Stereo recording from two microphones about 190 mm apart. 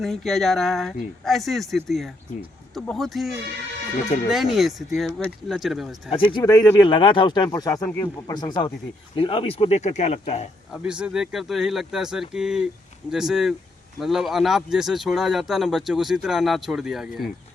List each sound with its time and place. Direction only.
0.0 s speech: centre (ahead or behind)
6.3 s speech: 20° left (ahead or behind); by 10.4 s 35° left (ahead or behind)
10.7 s speech: 5° right (ahead or behind)